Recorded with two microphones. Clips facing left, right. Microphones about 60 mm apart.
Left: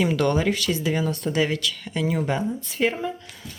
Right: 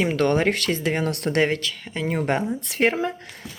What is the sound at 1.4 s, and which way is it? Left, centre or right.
Speech, right.